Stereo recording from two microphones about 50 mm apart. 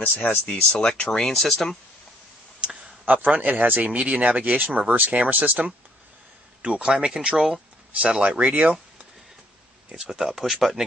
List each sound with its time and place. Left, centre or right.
0.0 s speech: left
0.7 s speech: centre
2.6 s clicking: centre
3.3 s speech: right
9.9 s speech: centre